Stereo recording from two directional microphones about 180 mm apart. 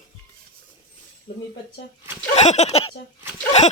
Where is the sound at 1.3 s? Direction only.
60° left (ahead or behind).